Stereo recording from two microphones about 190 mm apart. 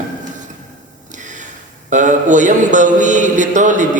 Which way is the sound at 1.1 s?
40° right (ahead or behind).